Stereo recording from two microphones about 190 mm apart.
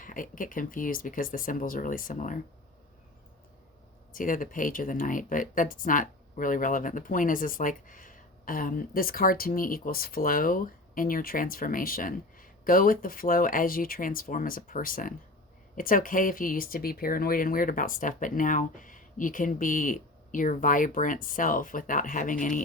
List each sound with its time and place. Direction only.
0.0 s speech: 45° left (ahead or behind)
4.1 s speech: 45° left (ahead or behind)